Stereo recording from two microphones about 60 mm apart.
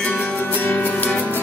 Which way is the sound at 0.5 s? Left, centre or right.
Left.